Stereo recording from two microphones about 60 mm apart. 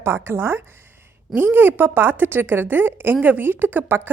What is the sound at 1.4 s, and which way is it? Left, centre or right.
A woman's voice, right.